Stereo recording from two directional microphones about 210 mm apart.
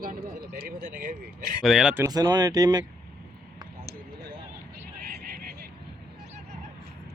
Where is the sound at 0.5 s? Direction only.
45° right (ahead or behind).